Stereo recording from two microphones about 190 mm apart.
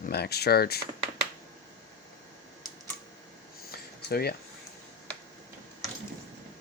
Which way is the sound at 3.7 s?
55° left (ahead or behind).